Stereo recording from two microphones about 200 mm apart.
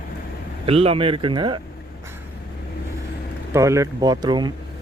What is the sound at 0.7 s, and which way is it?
Speech, 30° right (ahead or behind).